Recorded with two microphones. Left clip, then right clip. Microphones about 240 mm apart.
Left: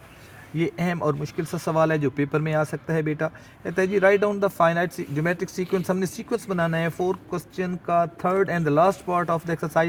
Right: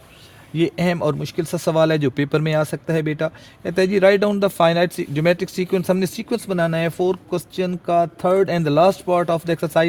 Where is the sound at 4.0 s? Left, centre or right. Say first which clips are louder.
Right 4 dB; right.